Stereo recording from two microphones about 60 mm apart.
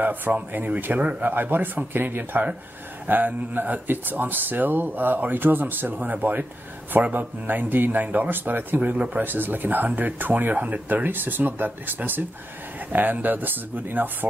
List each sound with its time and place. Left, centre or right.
0.0 s speech: right
8.9 s speech: centre
9.2 s speech: right